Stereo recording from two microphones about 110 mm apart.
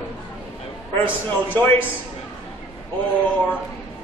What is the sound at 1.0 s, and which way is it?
Speech, 20° left (ahead or behind).